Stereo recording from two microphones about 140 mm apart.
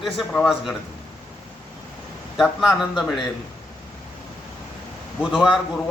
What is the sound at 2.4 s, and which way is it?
Speech, centre (ahead or behind).